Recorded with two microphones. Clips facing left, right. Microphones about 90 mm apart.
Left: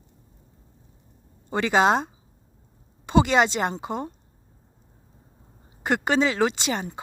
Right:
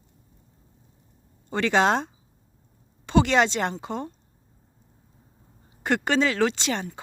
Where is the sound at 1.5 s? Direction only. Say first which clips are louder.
Left 1 dB; 10° left (ahead or behind).